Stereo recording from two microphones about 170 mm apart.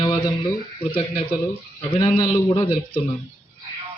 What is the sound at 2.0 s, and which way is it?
Speech, 25° left (ahead or behind).